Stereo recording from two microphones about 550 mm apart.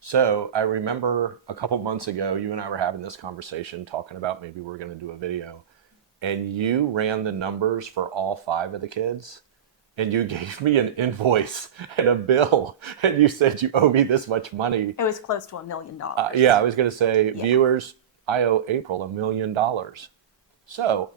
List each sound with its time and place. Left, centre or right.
0.0 s speech: right
16.1 s speech: right
18.9 s speech: right